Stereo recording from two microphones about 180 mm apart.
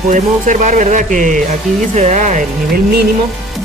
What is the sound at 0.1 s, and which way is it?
Speech, 45° right (ahead or behind).